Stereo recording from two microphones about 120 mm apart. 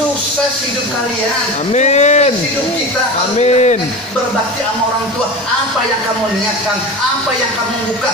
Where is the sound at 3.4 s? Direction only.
65° left (ahead or behind).